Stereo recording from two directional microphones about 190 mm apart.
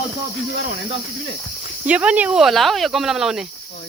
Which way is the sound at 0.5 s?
80° left.